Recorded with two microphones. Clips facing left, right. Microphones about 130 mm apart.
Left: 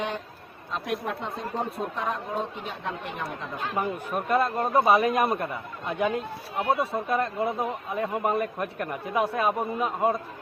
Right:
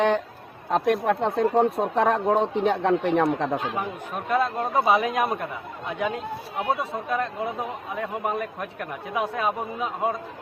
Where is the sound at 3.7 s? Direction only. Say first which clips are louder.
Left 2 dB; centre (ahead or behind).